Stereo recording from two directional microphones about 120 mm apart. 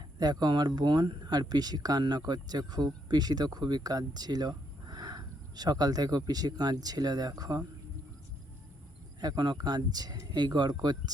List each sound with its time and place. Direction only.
0.2 s speech: 35° right (ahead or behind)
9.2 s speech: 35° right (ahead or behind)